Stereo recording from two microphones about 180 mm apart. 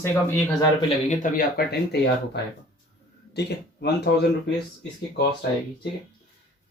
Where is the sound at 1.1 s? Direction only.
50° left (ahead or behind).